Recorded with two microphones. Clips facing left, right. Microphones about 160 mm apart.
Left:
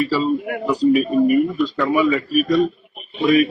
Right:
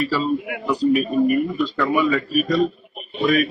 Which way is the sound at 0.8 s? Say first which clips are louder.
Left 2 dB; centre (ahead or behind).